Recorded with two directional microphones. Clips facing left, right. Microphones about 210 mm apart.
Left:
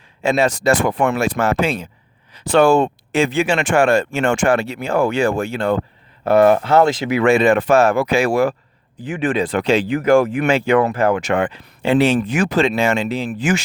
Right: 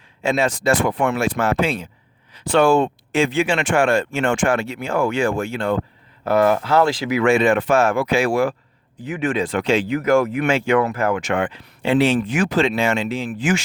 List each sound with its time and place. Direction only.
0.2 s speech: 40° left (ahead or behind)